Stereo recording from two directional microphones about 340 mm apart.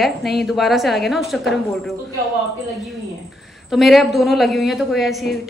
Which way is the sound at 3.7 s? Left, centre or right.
Centre.